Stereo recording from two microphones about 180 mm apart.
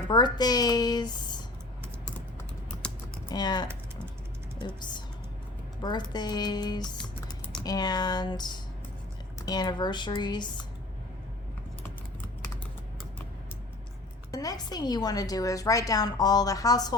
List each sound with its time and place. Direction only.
0.1 s a woman's voice: 25° left (ahead or behind)
2.8 s typing: 5° left (ahead or behind)
3.2 s a woman's voice: 25° left (ahead or behind)
14.3 s a woman's voice: 20° left (ahead or behind)